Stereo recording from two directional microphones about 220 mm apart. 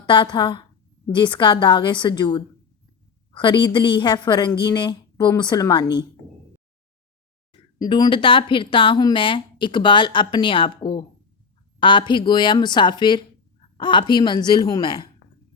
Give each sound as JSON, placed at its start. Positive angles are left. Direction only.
{"t": 0.0, "sound": "speech", "side_deg": 20}
{"t": 7.8, "sound": "speech", "side_deg": 20}